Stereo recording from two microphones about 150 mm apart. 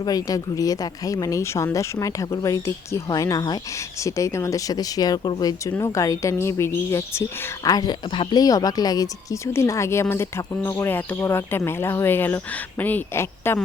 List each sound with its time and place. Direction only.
0.0 s speech: 25° left (ahead or behind)